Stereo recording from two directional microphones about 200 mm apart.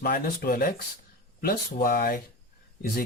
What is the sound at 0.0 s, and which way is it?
Speech, 50° left (ahead or behind).